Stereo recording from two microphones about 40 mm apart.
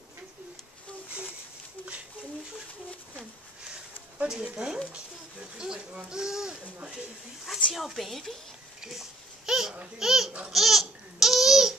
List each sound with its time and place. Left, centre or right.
3.2 s a sound: right
4.9 s speech: centre
7.7 s a woman's voice: centre
9.5 s babbling: centre
9.9 s speech: centre
10.5 s babbling: centre